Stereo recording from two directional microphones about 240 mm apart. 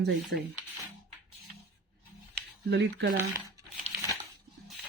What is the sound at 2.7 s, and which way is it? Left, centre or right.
Speech, right.